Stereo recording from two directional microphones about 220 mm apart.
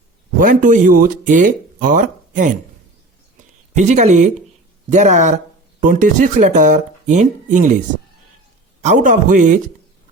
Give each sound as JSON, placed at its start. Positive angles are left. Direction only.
{"t": 0.3, "sound": "speech", "side_deg": -35}
{"t": 3.8, "sound": "speech", "side_deg": -35}
{"t": 8.8, "sound": "speech", "side_deg": -35}